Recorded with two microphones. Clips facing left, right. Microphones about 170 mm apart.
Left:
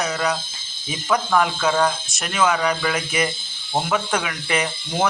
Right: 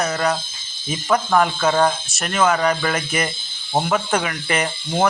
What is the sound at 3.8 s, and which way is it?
Speech, 5° right (ahead or behind).